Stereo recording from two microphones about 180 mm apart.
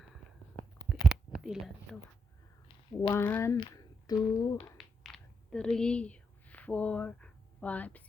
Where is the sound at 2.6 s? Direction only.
25° left (ahead or behind).